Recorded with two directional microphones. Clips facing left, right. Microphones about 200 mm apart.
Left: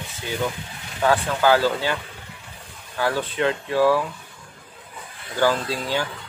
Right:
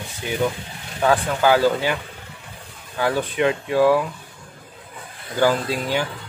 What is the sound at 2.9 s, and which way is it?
Speech, 15° right (ahead or behind).